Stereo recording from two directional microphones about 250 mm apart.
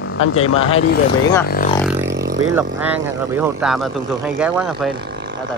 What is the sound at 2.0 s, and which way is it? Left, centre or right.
Vehicle, right.